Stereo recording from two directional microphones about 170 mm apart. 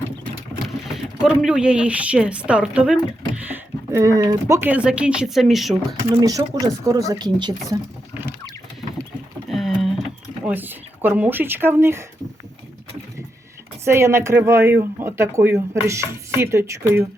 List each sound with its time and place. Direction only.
0.9 s speech: centre (ahead or behind)
6.0 s speech: 20° right (ahead or behind)
9.5 s a sound: centre (ahead or behind)
10.4 s speech: 10° right (ahead or behind)
13.8 s speech: 15° right (ahead or behind)